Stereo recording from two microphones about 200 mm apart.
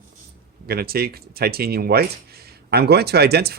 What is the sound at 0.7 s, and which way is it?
Speech, 50° right (ahead or behind).